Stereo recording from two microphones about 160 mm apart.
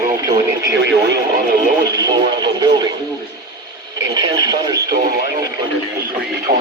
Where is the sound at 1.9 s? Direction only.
25° right (ahead or behind).